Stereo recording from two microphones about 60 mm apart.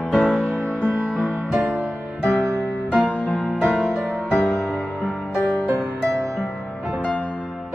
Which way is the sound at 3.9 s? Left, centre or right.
Right.